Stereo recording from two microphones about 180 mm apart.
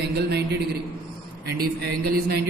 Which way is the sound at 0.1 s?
65° right (ahead or behind).